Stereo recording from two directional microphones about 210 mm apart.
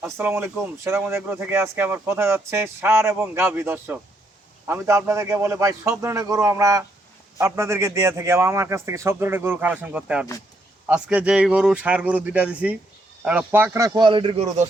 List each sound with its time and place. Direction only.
0.0 s speech: 10° right (ahead or behind); by 14.5 s 30° right (ahead or behind)